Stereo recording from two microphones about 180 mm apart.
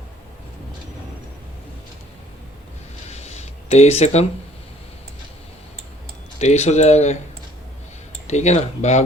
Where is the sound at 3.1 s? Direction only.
40° left (ahead or behind).